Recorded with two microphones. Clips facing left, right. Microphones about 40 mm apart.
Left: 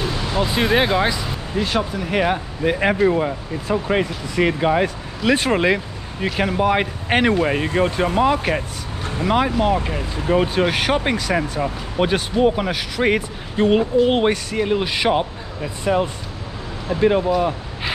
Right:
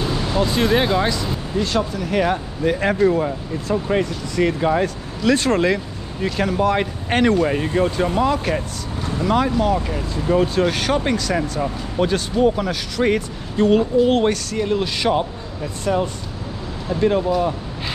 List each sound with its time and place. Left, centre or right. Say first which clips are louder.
0.3 s speech: even; centre
17.4 s vehicle: even; centre